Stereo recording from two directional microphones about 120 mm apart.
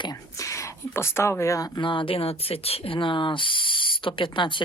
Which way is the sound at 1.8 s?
45° left (ahead or behind).